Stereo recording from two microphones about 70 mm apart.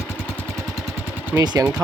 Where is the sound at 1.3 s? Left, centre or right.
Right.